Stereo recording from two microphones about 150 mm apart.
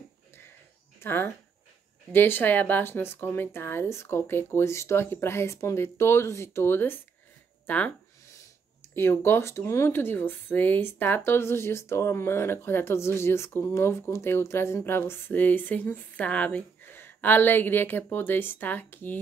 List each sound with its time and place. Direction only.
0.9 s speech: 15° left (ahead or behind)
8.9 s speech: 15° left (ahead or behind)